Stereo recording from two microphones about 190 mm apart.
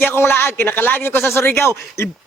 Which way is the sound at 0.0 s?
10° left (ahead or behind).